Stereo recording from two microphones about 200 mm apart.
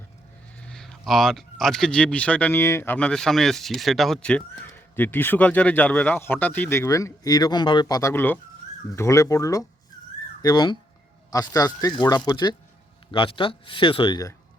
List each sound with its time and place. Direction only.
0.6 s speech: 5° left (ahead or behind); by 14.3 s 20° left (ahead or behind)